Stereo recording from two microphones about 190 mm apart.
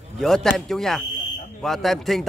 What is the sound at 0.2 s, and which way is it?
A man's voice, centre (ahead or behind).